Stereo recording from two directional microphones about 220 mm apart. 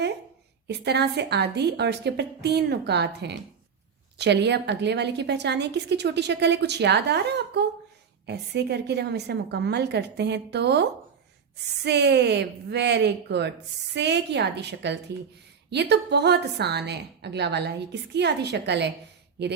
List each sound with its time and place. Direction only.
0.7 s a woman's voice: 50° right (ahead or behind)